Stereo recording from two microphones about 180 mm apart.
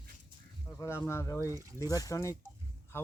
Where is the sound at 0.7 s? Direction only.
10° left (ahead or behind).